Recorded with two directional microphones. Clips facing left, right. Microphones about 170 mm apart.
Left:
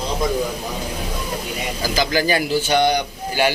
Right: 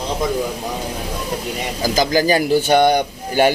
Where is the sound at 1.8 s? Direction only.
45° right (ahead or behind).